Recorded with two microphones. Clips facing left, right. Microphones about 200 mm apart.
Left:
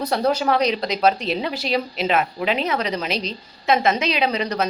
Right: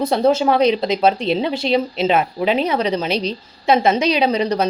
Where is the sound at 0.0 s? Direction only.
25° right (ahead or behind).